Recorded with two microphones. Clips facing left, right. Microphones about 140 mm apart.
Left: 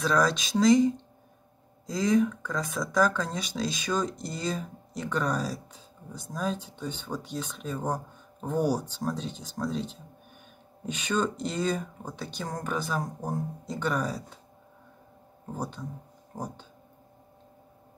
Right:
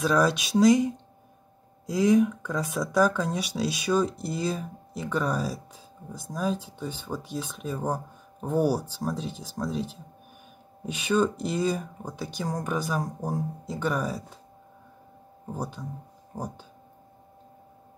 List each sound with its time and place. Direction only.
0.0 s speech: 10° right (ahead or behind)
15.4 s speech: 5° right (ahead or behind)